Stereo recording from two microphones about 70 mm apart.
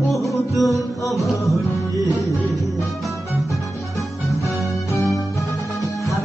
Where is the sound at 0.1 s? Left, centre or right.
Left.